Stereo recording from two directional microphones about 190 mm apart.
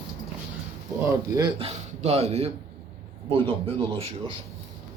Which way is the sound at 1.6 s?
35° right (ahead or behind).